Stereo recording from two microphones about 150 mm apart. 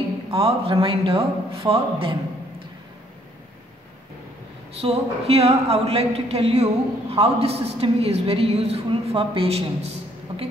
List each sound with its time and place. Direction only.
0.3 s a man's voice: 40° right (ahead or behind)
4.7 s a woman's voice: 40° right (ahead or behind)